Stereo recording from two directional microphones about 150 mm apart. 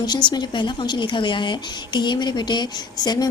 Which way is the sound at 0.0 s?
30° left (ahead or behind).